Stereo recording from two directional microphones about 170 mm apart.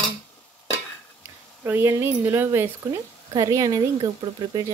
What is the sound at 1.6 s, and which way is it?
Speech, 15° right (ahead or behind).